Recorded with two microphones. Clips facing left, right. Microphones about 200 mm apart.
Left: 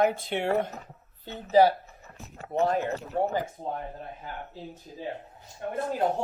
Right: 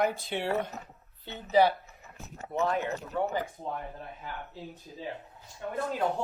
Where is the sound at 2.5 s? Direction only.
35° left (ahead or behind).